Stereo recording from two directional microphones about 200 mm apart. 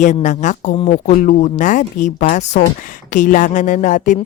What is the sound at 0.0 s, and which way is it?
Speech, 35° left (ahead or behind).